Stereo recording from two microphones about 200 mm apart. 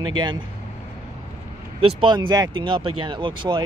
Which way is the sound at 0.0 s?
20° right (ahead or behind).